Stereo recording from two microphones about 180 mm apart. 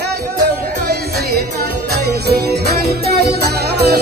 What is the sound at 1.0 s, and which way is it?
Music, 60° right (ahead or behind).